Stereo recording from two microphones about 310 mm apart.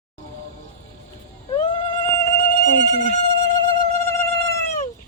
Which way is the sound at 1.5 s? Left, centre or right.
Centre.